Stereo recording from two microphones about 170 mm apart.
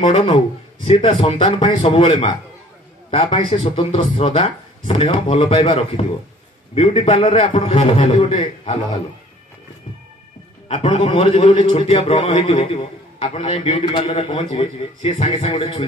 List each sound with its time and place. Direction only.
0.9 s a man's voice: 35° left (ahead or behind)
4.8 s speech: 45° left (ahead or behind)
5.1 s a man's voice: 35° left (ahead or behind)
10.7 s a man's voice: 35° left (ahead or behind)